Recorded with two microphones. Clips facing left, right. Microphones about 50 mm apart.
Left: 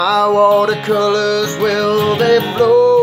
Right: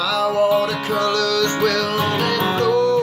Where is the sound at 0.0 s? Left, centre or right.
Left.